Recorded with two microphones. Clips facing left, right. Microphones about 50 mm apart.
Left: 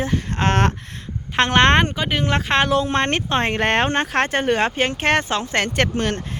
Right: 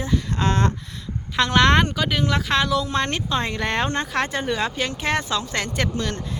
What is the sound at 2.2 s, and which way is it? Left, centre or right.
Speech, left.